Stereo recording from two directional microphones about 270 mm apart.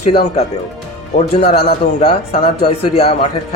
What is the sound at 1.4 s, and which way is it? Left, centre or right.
A man's voice, left.